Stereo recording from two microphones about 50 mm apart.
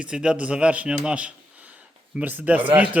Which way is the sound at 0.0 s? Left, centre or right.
Centre.